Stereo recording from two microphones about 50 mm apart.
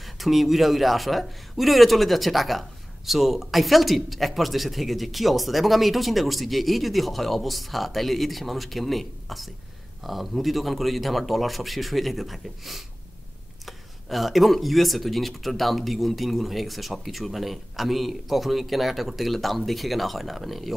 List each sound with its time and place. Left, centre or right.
0.0 s speech: centre